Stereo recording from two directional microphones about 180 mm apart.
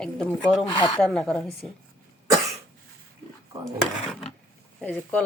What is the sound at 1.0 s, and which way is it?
Speech, 5° left (ahead or behind).